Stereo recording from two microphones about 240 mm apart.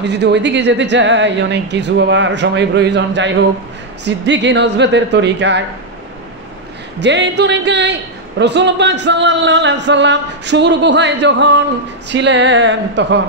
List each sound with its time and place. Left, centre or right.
0.0 s a man's voice: right
7.0 s a man's voice: right